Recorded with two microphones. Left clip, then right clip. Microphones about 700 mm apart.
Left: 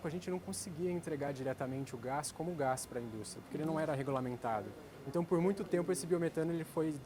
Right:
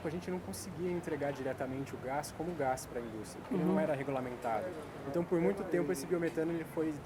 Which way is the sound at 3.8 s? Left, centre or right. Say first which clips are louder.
Right 2 dB; left.